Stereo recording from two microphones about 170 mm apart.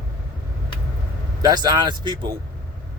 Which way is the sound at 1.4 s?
25° right (ahead or behind).